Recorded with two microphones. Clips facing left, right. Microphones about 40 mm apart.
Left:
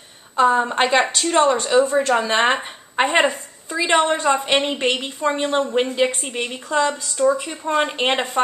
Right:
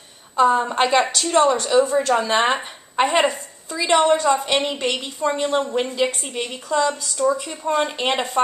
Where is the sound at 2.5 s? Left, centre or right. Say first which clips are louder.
Left 2 dB; left.